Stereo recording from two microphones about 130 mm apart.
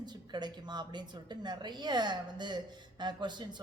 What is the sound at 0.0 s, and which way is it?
A man's voice, 35° right (ahead or behind).